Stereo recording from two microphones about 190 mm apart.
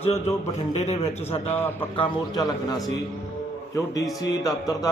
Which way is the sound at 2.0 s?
20° left (ahead or behind).